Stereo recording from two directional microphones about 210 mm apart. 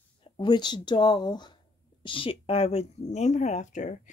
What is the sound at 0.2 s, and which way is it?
A woman's voice, 20° left (ahead or behind).